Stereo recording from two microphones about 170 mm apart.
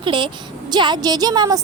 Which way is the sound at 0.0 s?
25° right (ahead or behind).